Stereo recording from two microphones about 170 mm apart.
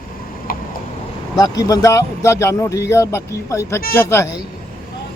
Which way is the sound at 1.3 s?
20° left (ahead or behind).